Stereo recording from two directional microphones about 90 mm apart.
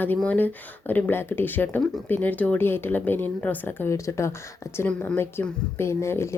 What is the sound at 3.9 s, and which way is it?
A woman's voice, 35° left (ahead or behind).